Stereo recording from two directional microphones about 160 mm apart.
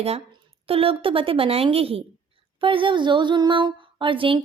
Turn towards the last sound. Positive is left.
turn(degrees=-35)  # may be behind; listen again after turning